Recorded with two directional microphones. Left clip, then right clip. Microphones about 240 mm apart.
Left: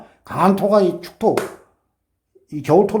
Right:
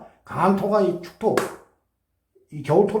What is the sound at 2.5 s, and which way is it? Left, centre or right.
Speech, left.